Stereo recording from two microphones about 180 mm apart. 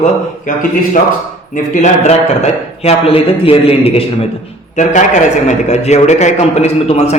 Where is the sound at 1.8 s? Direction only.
40° left (ahead or behind).